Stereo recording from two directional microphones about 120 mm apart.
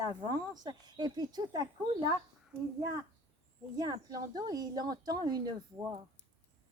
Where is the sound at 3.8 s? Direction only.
30° right (ahead or behind).